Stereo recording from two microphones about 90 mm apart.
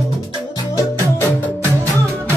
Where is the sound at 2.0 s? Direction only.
35° right (ahead or behind).